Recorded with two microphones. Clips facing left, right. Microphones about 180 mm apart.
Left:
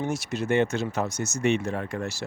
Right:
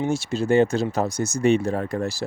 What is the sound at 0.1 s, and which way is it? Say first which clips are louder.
Speech: right 7 dB; 30° right (ahead or behind).